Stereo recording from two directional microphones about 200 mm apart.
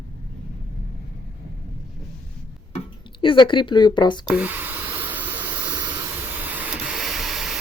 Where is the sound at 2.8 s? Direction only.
25° left (ahead or behind).